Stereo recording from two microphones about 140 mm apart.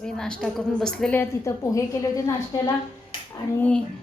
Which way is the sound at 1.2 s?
20° left (ahead or behind).